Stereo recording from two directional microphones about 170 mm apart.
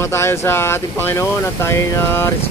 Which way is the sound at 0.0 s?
15° left (ahead or behind).